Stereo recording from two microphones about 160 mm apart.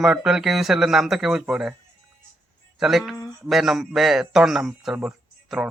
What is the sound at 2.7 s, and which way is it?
A man's voice, centre (ahead or behind).